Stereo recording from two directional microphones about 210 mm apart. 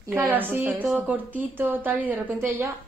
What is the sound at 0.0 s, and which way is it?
A woman's voice, 10° right (ahead or behind).